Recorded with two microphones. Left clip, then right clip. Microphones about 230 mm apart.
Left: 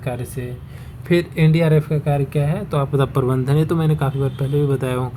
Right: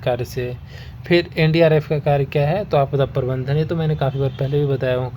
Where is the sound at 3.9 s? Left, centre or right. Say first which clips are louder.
Right 2 dB; centre.